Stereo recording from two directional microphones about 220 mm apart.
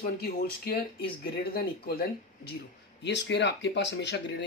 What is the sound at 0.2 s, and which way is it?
Speech, 45° left (ahead or behind).